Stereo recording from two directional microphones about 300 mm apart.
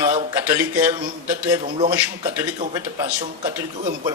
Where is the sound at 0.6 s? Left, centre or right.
Centre.